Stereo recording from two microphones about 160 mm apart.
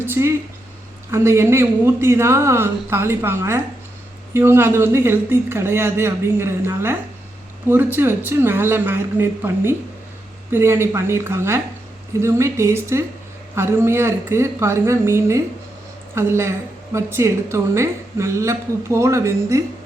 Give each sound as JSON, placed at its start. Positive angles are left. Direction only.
{"t": 0.0, "sound": "a woman's voice", "side_deg": -15}
{"t": 7.9, "sound": "a woman's voice", "side_deg": -15}